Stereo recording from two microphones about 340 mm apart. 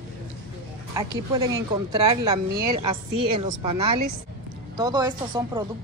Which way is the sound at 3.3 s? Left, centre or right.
Centre.